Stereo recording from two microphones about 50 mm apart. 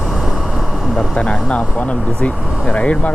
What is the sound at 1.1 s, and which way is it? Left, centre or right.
Speech, centre.